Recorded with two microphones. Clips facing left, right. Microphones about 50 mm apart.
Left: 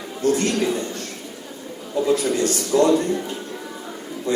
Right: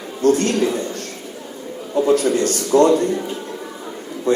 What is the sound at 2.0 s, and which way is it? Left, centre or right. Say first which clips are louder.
A man's voice: right 3 dB; right.